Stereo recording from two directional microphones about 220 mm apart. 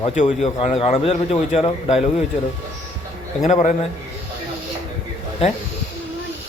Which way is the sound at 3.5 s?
30° left (ahead or behind).